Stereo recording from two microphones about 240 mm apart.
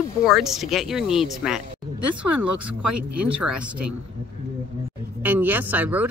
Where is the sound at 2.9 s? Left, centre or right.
Right.